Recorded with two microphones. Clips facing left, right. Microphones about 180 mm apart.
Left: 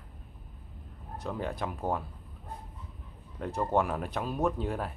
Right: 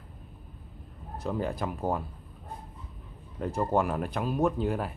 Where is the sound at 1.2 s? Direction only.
Centre (ahead or behind).